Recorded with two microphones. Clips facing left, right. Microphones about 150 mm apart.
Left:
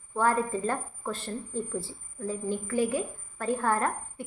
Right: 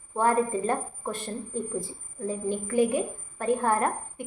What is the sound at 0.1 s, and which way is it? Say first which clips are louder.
A woman's voice: right 2 dB; 20° right (ahead or behind).